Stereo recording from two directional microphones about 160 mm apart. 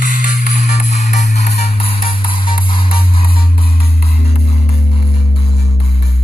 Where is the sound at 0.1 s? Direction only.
55° left (ahead or behind); by 3.3 s 35° left (ahead or behind).